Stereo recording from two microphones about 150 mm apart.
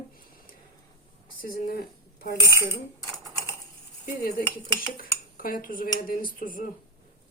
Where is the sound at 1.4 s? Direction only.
70° left (ahead or behind).